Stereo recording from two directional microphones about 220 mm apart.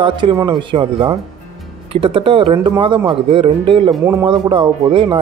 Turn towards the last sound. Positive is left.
turn(degrees=-25)  # may be behind; listen again after turning